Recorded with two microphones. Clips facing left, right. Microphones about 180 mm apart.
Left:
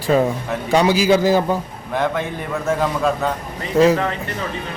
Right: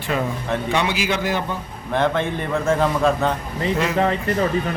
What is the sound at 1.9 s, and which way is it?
A man's voice, 5° left (ahead or behind).